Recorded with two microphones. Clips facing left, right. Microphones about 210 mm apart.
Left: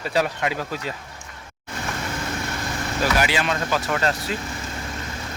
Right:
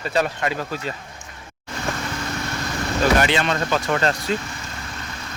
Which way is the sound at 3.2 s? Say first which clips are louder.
Right 2 dB; 5° left (ahead or behind).